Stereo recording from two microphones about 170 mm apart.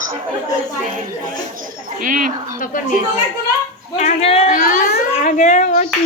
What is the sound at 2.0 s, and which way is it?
Speech, 50° right (ahead or behind).